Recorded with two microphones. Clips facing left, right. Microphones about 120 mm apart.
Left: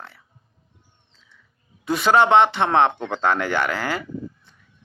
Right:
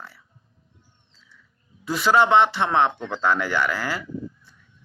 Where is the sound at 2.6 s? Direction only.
55° left (ahead or behind).